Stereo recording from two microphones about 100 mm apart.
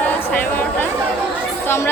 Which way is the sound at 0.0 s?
20° left (ahead or behind).